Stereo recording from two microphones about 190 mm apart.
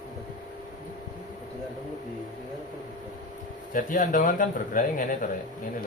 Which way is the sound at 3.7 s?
45° left (ahead or behind).